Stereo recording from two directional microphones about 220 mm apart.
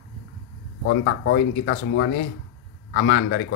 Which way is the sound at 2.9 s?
60° left (ahead or behind).